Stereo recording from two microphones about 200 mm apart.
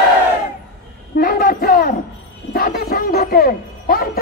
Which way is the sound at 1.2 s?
45° left (ahead or behind).